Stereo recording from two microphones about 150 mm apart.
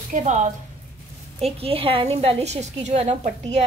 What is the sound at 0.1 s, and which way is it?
Speech, 60° right (ahead or behind).